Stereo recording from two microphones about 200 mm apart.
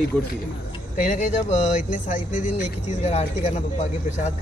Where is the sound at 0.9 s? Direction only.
40° left (ahead or behind).